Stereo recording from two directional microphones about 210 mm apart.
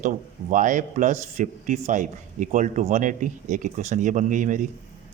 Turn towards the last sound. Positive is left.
turn(degrees=-35)  # may be behind; listen again after turning